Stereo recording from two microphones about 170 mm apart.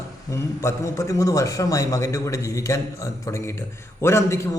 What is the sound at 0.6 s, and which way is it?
A man's voice, 20° left (ahead or behind).